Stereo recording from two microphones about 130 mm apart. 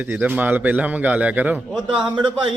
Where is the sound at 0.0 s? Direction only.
15° right (ahead or behind).